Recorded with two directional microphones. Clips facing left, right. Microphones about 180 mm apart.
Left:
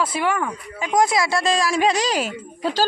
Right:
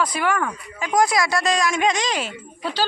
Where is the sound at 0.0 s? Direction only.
25° left (ahead or behind).